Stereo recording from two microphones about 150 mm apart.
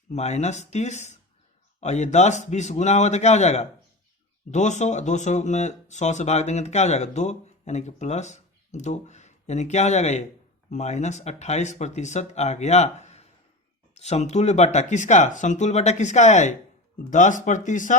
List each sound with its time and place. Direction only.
0.1 s speech: 50° left (ahead or behind)